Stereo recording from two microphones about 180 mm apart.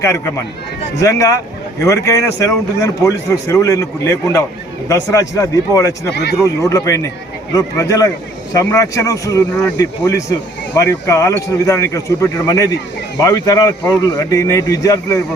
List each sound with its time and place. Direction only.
0.9 s a man's voice: 20° left (ahead or behind)